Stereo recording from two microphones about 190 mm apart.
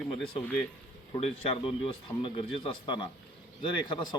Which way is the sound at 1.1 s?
30° left (ahead or behind).